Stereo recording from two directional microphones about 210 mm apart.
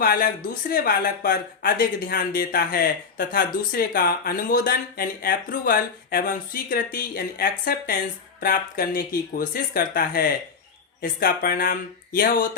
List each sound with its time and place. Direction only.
0.0 s speech: 45° left (ahead or behind)